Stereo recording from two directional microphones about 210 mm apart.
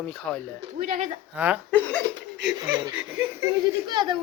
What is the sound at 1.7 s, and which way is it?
Speech, 10° left (ahead or behind).